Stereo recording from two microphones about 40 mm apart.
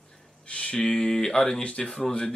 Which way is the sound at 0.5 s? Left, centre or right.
Left.